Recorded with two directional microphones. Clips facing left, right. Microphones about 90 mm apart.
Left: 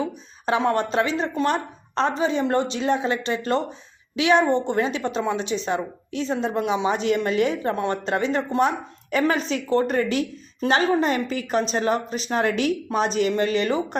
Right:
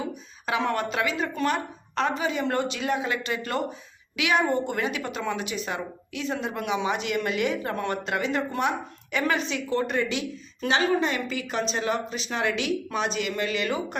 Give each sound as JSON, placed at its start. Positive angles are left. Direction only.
{"t": 0.0, "sound": "a woman's voice", "side_deg": 35}